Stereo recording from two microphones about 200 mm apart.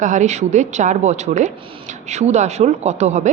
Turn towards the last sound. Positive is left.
turn(degrees=-35)  # may be behind; listen again after turning